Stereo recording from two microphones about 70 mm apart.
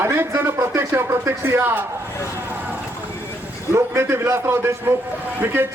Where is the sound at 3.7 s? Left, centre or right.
Right.